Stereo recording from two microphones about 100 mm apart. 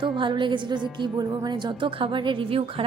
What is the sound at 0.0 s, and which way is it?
A woman's voice, 55° right (ahead or behind).